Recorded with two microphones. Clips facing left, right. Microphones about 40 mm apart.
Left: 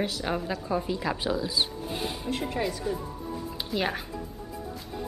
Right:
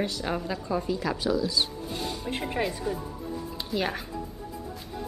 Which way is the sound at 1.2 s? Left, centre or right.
Left.